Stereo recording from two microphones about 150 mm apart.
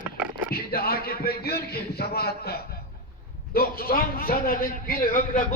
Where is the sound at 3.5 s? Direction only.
80° left.